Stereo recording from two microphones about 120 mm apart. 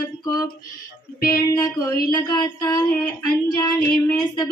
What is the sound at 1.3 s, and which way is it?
Speech, 25° left (ahead or behind).